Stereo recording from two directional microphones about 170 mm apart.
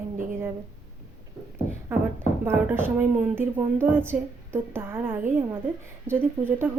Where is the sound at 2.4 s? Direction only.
15° right (ahead or behind).